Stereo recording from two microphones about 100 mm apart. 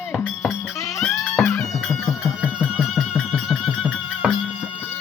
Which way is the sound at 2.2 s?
10° right (ahead or behind).